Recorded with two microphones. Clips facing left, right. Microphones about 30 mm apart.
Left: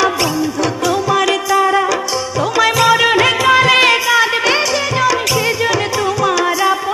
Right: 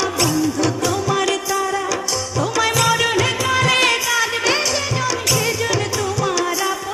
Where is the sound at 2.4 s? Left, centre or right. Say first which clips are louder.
Left 5 dB; centre.